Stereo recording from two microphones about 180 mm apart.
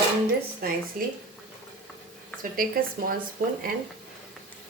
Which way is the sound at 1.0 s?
50° right (ahead or behind).